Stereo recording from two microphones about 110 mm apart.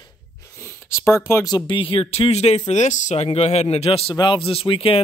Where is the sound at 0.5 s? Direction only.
20° left (ahead or behind).